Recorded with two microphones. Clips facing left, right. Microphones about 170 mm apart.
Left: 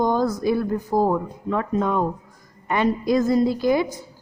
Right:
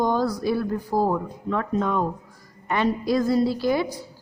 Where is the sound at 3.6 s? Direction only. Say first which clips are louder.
Left 3 dB; 20° left (ahead or behind).